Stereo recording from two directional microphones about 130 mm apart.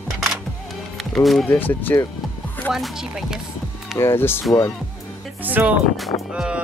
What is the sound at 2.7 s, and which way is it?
Music, 5° right (ahead or behind).